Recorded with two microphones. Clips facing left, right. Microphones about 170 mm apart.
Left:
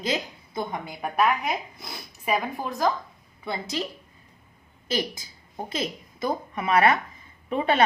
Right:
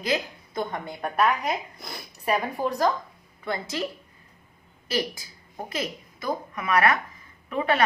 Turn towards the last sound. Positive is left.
turn(degrees=25)  # may be behind; listen again after turning